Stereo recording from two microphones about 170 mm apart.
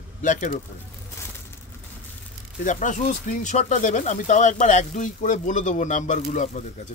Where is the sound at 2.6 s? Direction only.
50° left (ahead or behind).